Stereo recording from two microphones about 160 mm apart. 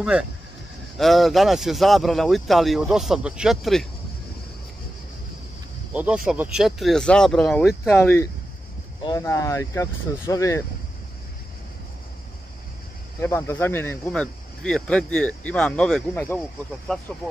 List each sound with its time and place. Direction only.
0.9 s speech: centre (ahead or behind)
5.9 s speech: 5° right (ahead or behind); by 10.6 s 20° left (ahead or behind)
13.2 s speech: 15° left (ahead or behind)